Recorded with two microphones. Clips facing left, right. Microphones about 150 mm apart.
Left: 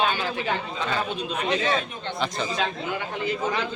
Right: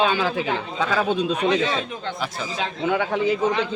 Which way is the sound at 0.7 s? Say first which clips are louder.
Right 6 dB; 90° right.